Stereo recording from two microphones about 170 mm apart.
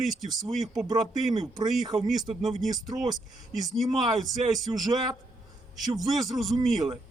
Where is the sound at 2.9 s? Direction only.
25° right (ahead or behind).